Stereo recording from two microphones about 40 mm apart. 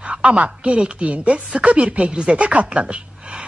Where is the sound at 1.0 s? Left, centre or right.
Right.